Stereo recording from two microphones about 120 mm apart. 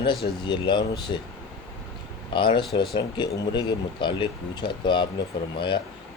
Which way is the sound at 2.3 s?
40° left (ahead or behind).